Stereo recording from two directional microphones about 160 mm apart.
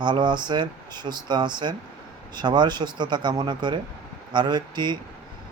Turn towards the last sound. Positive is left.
turn(degrees=-30)  # may be behind; listen again after turning